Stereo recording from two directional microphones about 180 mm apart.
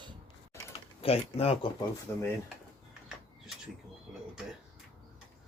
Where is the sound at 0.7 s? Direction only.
35° left (ahead or behind).